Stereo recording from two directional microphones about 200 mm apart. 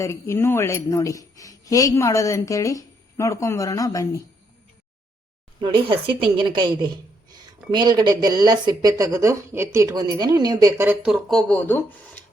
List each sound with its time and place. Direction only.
0.0 s speech: 15° left (ahead or behind)
5.5 s a woman's voice: 25° right (ahead or behind); by 12.2 s 10° left (ahead or behind)